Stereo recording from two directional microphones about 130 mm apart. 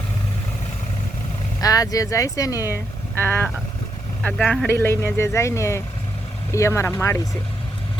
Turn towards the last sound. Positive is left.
turn(degrees=25)  # may be behind; listen again after turning